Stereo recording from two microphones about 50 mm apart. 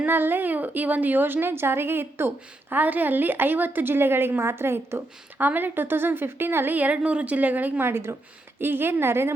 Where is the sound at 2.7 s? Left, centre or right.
Right.